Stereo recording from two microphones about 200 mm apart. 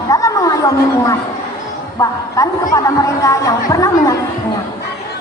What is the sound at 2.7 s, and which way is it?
A woman's voice, 15° left (ahead or behind).